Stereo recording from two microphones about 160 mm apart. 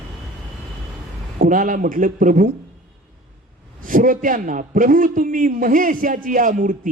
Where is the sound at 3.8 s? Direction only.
55° right (ahead or behind).